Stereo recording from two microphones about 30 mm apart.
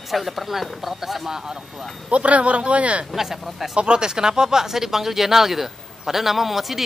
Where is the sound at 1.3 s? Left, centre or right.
Right.